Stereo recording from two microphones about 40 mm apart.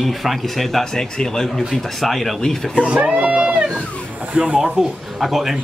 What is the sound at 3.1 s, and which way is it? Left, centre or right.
Speech, right.